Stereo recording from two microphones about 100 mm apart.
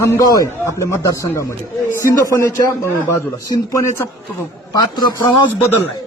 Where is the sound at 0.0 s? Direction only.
30° left (ahead or behind).